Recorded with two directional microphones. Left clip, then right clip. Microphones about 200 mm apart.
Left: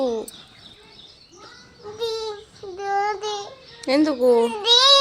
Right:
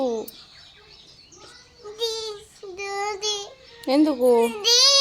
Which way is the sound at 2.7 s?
30° right (ahead or behind).